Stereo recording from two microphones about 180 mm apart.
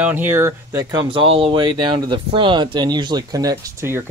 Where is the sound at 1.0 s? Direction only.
30° right (ahead or behind).